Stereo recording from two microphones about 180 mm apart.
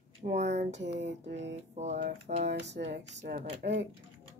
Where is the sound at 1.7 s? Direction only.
40° right (ahead or behind).